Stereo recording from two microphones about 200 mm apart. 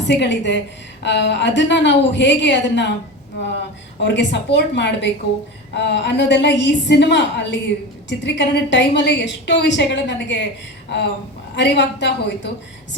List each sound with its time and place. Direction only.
0.0 s a woman's voice: 60° left (ahead or behind)
4.0 s a woman's voice: 60° left (ahead or behind)
10.8 s a sound: 60° left (ahead or behind)
11.5 s a woman's voice: 60° left (ahead or behind)